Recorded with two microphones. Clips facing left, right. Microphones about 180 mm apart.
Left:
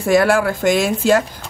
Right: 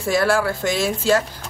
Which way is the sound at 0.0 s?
55° left (ahead or behind).